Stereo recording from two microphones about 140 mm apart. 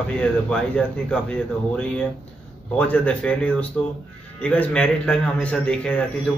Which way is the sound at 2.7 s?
10° left (ahead or behind).